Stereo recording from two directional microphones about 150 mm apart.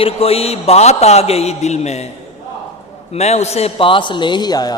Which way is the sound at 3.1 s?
45° left (ahead or behind).